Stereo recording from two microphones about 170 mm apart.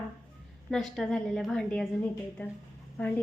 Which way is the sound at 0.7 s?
Centre (ahead or behind).